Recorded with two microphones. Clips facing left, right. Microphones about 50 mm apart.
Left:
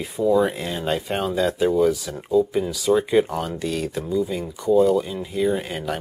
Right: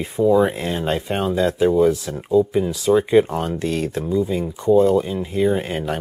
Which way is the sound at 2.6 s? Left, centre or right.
Right.